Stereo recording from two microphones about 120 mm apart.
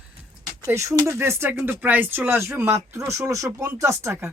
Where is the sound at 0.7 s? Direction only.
25° right (ahead or behind).